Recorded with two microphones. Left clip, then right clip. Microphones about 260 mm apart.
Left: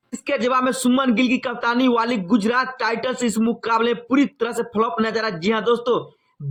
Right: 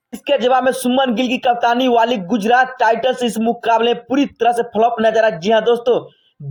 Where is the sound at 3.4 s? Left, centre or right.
Centre.